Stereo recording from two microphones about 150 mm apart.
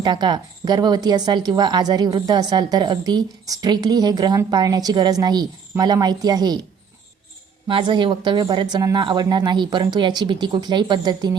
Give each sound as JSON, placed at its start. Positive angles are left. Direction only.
{"t": 0.0, "sound": "speech", "side_deg": -30}
{"t": 7.7, "sound": "speech", "side_deg": -30}